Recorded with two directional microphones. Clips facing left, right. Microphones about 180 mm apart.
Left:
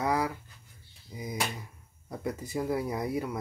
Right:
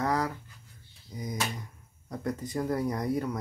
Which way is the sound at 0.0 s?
10° left (ahead or behind).